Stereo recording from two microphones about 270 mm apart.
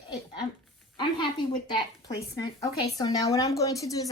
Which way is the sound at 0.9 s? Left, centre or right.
Centre.